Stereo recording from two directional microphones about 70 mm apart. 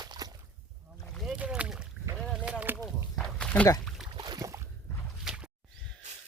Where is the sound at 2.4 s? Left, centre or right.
Centre.